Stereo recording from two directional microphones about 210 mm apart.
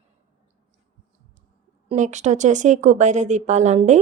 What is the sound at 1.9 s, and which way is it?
Speech, 35° right (ahead or behind).